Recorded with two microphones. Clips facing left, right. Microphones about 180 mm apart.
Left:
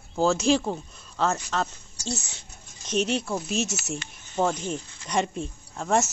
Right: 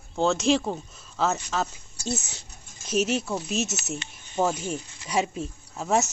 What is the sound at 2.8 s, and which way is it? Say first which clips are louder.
Speech: right 1 dB; 5° right (ahead or behind).